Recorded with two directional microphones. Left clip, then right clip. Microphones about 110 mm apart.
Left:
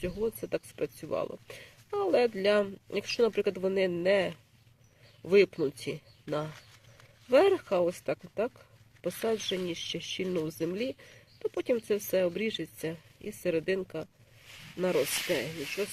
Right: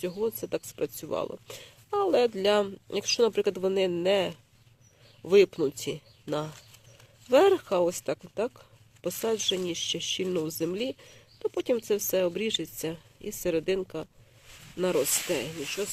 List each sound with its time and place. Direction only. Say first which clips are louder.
0.0 s speech: right 2 dB; 20° right (ahead or behind)
7.3 s speech: right 2 dB; 20° right (ahead or behind)
14.9 s speech: right 1 dB; 50° right (ahead or behind)
15.3 s speech: right 1 dB; 15° right (ahead or behind)